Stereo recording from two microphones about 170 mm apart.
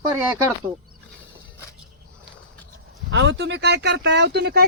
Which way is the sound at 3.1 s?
90° right.